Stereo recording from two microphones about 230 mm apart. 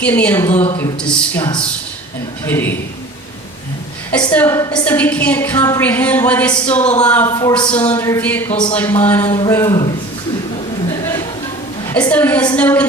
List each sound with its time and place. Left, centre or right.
0.0 s a woman's voice: centre
2.5 s a woman's voice: centre
4.3 s a woman's voice: centre
10.8 s a sound: centre
11.9 s a woman's voice: centre